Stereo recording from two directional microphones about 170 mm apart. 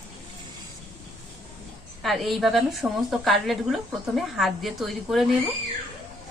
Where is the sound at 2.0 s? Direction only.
Centre (ahead or behind).